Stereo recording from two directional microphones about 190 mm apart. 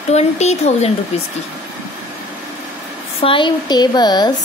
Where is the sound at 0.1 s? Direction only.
35° left (ahead or behind).